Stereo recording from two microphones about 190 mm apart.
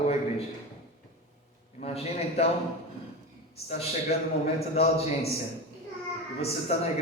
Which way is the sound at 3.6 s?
35° left (ahead or behind).